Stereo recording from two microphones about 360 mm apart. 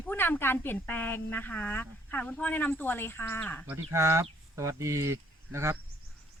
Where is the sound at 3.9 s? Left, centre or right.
Centre.